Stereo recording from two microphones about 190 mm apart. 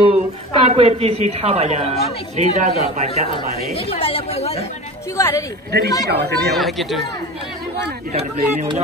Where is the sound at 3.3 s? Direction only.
30° left (ahead or behind).